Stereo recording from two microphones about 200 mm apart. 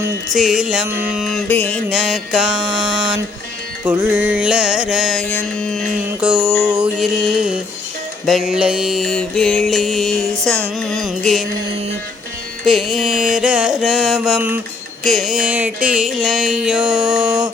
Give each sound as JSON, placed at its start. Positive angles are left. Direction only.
{"t": 0.3, "sound": "mantra", "side_deg": -5}
{"t": 3.8, "sound": "mantra", "side_deg": -10}
{"t": 12.6, "sound": "mantra", "side_deg": 0}